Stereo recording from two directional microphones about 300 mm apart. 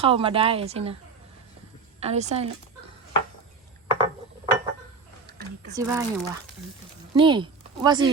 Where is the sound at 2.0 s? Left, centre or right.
Right.